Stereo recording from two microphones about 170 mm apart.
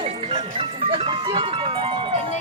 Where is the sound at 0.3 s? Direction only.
30° right (ahead or behind).